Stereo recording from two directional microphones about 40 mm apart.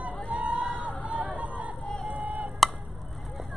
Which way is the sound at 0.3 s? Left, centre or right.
Right.